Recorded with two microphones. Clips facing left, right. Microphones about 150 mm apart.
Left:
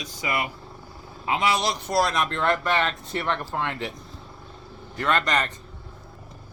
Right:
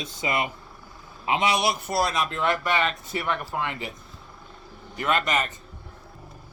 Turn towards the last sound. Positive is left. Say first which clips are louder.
# left 1 dB
turn(degrees=-5)  # may be behind; listen again after turning